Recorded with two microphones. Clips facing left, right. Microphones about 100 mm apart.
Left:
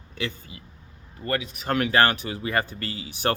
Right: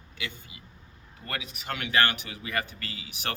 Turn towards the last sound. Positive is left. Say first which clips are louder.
# left 9 dB
turn(degrees=35)  # may be behind; listen again after turning